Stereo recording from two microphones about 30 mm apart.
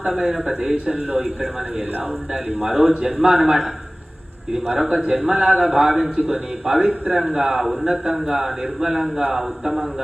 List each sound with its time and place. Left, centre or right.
0.0 s a man's voice: centre
0.9 s a man's voice: right
2.6 s a man's voice: centre
4.8 s a man's voice: centre